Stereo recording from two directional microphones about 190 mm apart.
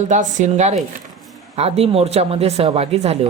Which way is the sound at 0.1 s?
40° right (ahead or behind).